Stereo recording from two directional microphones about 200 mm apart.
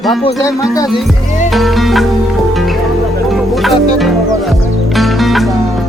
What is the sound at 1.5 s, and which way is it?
Music, centre (ahead or behind).